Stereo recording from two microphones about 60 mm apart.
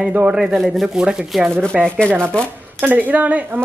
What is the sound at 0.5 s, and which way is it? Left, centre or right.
Speech, centre.